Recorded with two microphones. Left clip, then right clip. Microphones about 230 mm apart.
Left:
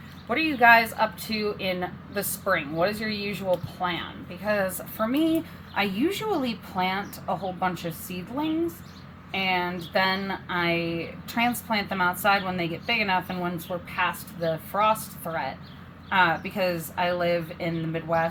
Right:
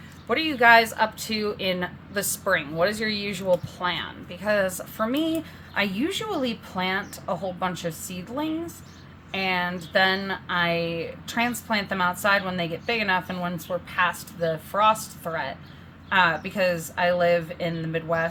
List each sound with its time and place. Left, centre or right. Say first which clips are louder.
0.3 s a woman's voice: right 1 dB; centre
9.3 s a woman's voice: even; centre